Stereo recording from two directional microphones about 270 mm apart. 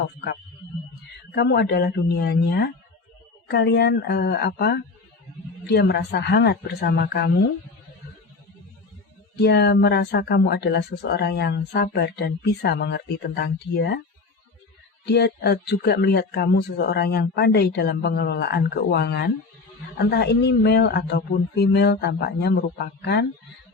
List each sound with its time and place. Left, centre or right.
1.4 s speech: left
9.3 s speech: left
15.0 s speech: left